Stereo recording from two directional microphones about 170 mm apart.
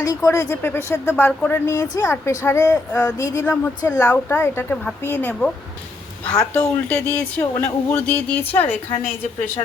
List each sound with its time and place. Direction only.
0.0 s speech: 20° left (ahead or behind)